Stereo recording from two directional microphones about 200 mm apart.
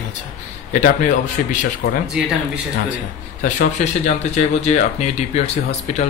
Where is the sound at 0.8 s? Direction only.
40° left (ahead or behind).